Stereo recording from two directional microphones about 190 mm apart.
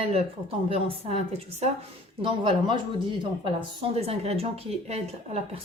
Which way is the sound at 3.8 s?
30° right (ahead or behind).